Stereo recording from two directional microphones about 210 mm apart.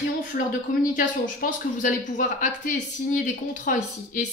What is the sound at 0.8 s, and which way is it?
Speech, 40° left (ahead or behind).